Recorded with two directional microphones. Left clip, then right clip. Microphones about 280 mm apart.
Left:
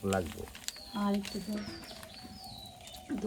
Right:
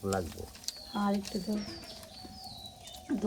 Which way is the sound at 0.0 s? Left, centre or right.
Left.